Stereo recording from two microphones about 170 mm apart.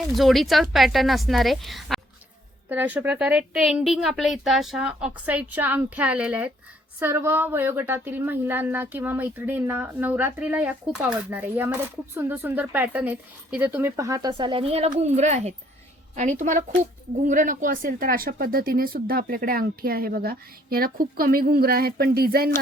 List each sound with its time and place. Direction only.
0.1 s a woman's voice: centre (ahead or behind); by 22.5 s 65° right (ahead or behind)